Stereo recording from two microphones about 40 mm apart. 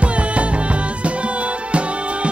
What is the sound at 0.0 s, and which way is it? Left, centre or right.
Music, right.